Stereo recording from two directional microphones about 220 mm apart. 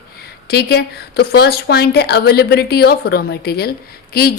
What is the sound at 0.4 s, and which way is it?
A woman's voice, 45° left (ahead or behind).